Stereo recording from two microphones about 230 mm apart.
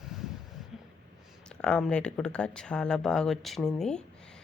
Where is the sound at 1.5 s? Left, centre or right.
Centre.